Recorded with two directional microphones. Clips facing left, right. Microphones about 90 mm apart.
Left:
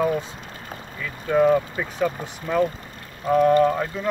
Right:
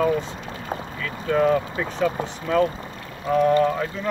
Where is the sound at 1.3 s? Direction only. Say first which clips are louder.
Left 2 dB; 5° left (ahead or behind).